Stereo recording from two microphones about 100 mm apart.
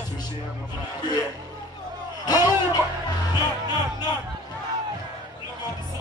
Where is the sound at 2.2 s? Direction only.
40° left (ahead or behind).